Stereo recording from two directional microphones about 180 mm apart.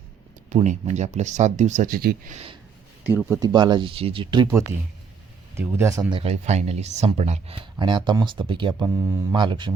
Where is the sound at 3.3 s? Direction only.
25° right (ahead or behind).